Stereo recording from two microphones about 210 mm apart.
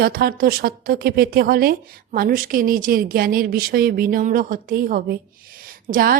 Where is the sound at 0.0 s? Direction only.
45° right (ahead or behind).